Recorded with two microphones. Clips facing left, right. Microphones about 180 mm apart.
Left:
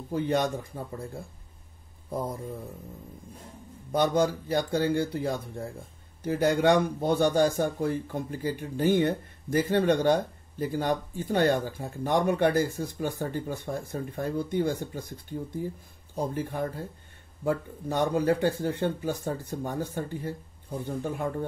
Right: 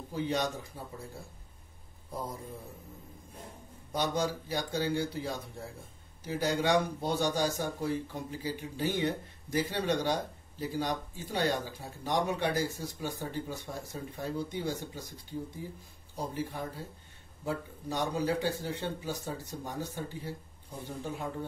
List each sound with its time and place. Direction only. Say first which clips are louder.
0.1 s speech: left 6 dB; 55° left (ahead or behind)
2.0 s mantra: left 7 dB; 55° left (ahead or behind)
3.9 s speech: left 7 dB; 55° left (ahead or behind)